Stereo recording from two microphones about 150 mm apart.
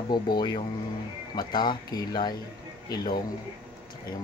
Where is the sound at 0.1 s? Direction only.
30° left (ahead or behind).